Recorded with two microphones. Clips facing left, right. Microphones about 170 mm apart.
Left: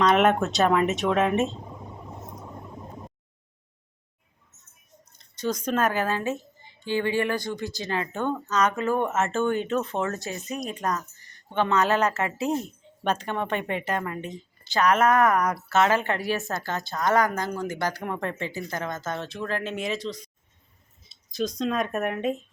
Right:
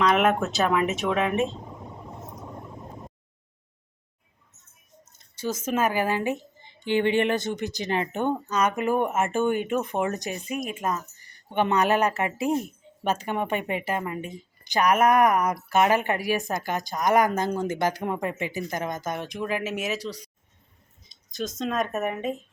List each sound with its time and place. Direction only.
0.0 s speech: centre (ahead or behind)
5.0 s a woman's voice: 5° right (ahead or behind)
21.2 s a sound: centre (ahead or behind)
21.6 s speech: centre (ahead or behind)